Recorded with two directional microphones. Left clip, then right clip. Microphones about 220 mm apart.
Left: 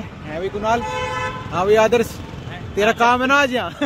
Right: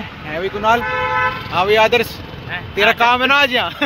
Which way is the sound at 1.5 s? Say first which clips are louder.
Right 1 dB; 35° left (ahead or behind).